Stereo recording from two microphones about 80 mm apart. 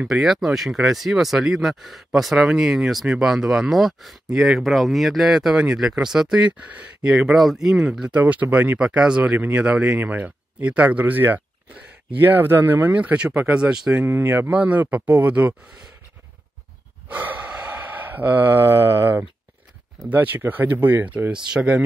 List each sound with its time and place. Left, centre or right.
0.0 s speech: centre
8.1 s speech: centre
14.0 s speech: right
17.1 s gasp: right
20.1 s speech: right